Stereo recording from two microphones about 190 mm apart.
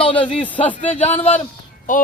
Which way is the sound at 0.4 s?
10° left (ahead or behind).